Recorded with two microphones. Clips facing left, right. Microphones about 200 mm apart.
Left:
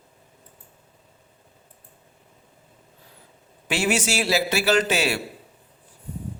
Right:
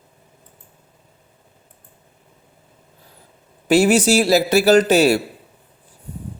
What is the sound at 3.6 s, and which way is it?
A man's voice, 40° right (ahead or behind).